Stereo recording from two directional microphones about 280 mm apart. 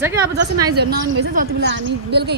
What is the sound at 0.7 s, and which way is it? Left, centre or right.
A woman's voice, right.